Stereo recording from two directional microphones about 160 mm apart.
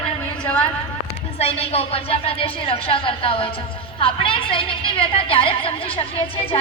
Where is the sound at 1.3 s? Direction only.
40° left (ahead or behind).